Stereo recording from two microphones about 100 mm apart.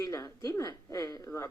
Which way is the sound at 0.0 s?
35° left (ahead or behind).